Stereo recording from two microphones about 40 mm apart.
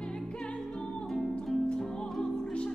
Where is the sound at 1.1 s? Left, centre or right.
Centre.